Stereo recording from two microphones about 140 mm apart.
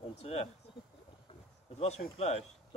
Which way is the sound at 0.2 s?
45° left (ahead or behind).